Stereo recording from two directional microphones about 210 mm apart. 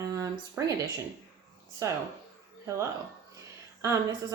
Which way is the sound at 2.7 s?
15° right (ahead or behind).